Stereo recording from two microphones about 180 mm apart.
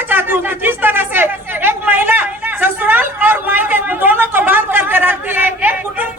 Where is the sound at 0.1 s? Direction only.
10° right (ahead or behind).